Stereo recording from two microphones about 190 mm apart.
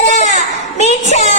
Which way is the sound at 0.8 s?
35° left (ahead or behind).